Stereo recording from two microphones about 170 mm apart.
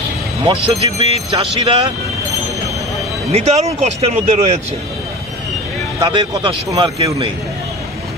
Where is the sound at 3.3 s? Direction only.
40° right (ahead or behind).